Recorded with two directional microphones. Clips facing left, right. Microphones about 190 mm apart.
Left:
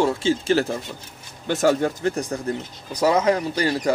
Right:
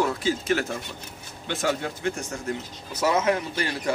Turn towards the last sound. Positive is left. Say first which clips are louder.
# left 6 dB
turn(degrees=35)  # may be behind; listen again after turning